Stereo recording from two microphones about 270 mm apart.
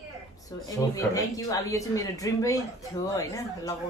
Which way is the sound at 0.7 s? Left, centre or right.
Centre.